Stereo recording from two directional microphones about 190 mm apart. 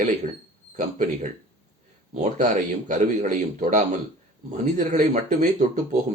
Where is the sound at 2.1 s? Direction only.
40° right (ahead or behind).